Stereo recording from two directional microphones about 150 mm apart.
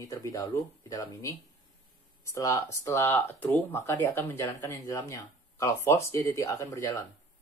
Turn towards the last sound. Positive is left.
turn(degrees=20)  # may be behind; listen again after turning